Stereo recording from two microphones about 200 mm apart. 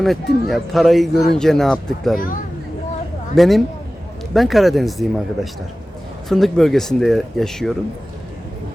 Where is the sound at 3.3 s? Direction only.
Centre (ahead or behind).